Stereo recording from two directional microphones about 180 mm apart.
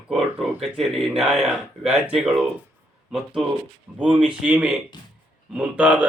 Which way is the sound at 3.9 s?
5° right (ahead or behind).